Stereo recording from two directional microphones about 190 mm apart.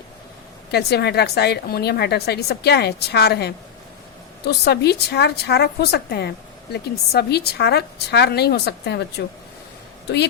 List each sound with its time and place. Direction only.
0.7 s a woman's voice: 60° left (ahead or behind)